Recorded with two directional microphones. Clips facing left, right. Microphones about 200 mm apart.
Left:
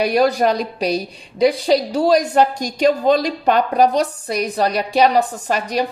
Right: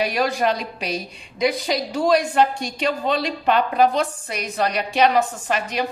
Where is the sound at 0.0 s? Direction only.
40° left (ahead or behind).